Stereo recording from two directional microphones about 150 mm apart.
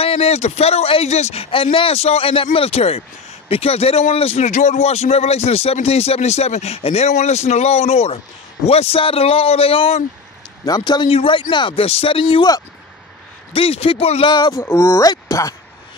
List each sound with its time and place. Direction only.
0.0 s speech: 40° left (ahead or behind)
10.6 s speech: 30° left (ahead or behind)
13.5 s speech: 40° left (ahead or behind)
14.3 s speech: 25° left (ahead or behind)